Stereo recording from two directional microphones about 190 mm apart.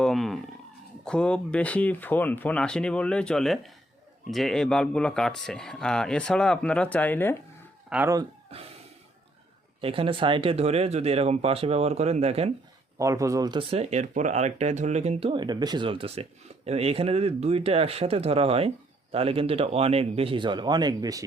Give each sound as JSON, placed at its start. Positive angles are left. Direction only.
{"t": 0.0, "sound": "livestock", "side_deg": 0}
{"t": 1.0, "sound": "speech", "side_deg": 5}
{"t": 7.9, "sound": "speech", "side_deg": -10}
{"t": 9.8, "sound": "speech", "side_deg": -30}
{"t": 13.0, "sound": "speech", "side_deg": -15}